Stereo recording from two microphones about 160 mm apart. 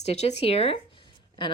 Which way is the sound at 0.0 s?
40° left (ahead or behind).